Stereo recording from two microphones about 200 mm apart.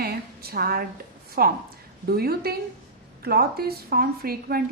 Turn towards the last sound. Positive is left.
turn(degrees=-50)  # may be behind; listen again after turning